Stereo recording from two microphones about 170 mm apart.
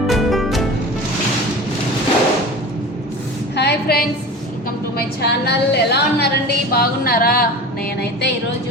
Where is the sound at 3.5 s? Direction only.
75° left (ahead or behind).